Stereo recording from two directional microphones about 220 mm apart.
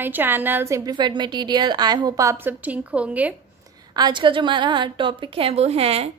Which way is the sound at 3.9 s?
20° right (ahead or behind).